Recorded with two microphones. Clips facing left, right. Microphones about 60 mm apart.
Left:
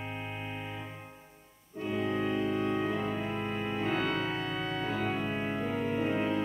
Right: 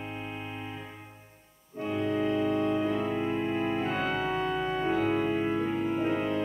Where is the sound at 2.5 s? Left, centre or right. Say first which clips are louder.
Right 3 dB; left.